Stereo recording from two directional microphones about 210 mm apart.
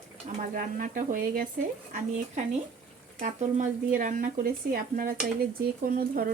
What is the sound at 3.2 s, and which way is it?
Speech, 35° right (ahead or behind).